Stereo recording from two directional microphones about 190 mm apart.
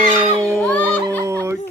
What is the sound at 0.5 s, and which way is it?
Music, 5° left (ahead or behind).